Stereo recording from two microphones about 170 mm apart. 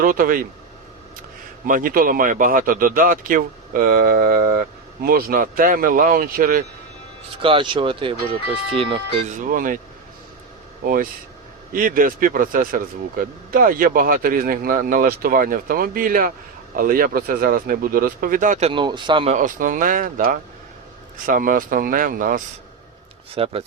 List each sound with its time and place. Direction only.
0.0 s speech: 55° right (ahead or behind)
1.6 s speech: 55° right (ahead or behind)
7.4 s speech: 30° right (ahead or behind)
9.3 s speech: 50° right (ahead or behind)
10.8 s speech: 55° right (ahead or behind)
18.7 s speech: 25° right (ahead or behind)
19.3 s speech: 50° right (ahead or behind)
23.3 s speech: 35° right (ahead or behind)